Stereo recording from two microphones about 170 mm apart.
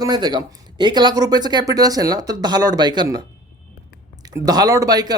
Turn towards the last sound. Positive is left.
turn(degrees=-25)  # may be behind; listen again after turning